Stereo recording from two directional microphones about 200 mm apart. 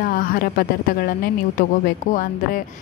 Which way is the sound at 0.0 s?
45° left (ahead or behind).